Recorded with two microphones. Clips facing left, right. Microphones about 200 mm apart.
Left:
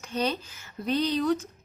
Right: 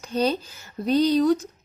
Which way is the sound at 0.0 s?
35° right (ahead or behind).